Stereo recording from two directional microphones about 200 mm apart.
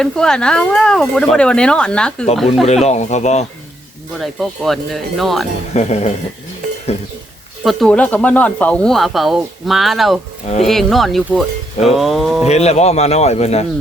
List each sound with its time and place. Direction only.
0.0 s speech: 5° left (ahead or behind)
2.6 s a man's voice: 35° left (ahead or behind)
4.2 s speech: centre (ahead or behind)
5.7 s a man's voice: 35° left (ahead or behind)
7.6 s speech: centre (ahead or behind)
12.5 s a man's voice: 35° left (ahead or behind)